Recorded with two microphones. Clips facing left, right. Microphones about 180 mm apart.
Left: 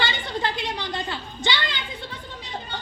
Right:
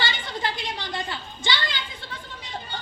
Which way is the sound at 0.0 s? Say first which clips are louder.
Left 2 dB; 20° left (ahead or behind).